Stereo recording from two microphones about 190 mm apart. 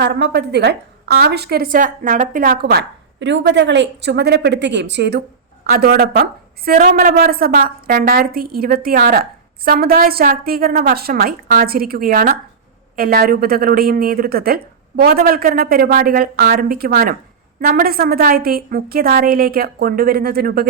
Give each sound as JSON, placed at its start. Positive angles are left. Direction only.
{"t": 0.0, "sound": "a woman's voice", "side_deg": -60}
{"t": 5.6, "sound": "a woman's voice", "side_deg": -50}